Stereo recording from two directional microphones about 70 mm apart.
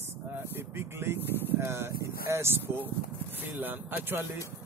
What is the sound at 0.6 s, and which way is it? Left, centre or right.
Vehicle, right.